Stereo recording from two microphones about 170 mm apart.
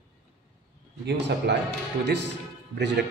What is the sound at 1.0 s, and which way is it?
A man's voice, 90° right.